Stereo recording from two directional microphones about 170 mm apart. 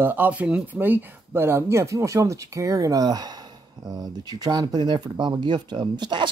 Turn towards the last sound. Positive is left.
turn(degrees=-25)  # may be behind; listen again after turning